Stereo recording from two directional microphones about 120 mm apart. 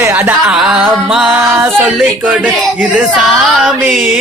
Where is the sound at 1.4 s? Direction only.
20° right (ahead or behind).